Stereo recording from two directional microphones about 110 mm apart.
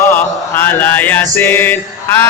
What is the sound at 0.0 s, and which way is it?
Chant, 20° left (ahead or behind).